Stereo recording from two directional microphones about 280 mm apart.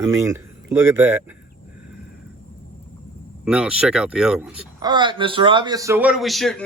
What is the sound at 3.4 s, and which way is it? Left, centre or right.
Speech, centre.